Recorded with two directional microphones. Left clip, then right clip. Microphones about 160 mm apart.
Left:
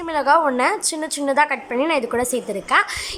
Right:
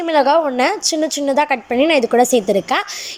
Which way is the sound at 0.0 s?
15° right (ahead or behind).